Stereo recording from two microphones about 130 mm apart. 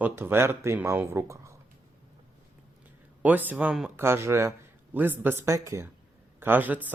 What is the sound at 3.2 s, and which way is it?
Speech, 15° right (ahead or behind).